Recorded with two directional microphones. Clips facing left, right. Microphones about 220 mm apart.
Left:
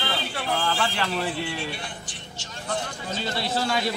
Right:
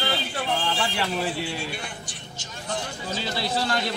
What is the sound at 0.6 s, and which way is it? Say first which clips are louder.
Speech: left 1 dB; 10° right (ahead or behind).